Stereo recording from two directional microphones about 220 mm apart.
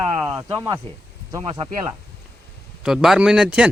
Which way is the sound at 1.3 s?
20° right (ahead or behind).